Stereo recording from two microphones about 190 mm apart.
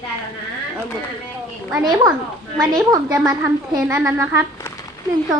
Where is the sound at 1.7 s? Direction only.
20° right (ahead or behind).